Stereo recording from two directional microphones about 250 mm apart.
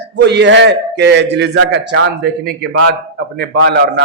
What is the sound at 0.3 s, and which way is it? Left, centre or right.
A man's voice, right.